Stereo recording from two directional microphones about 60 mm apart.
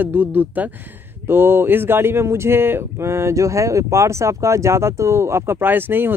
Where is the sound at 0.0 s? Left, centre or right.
Right.